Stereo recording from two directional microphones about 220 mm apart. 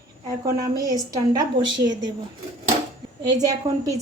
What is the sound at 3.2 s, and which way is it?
Speech, 15° right (ahead or behind).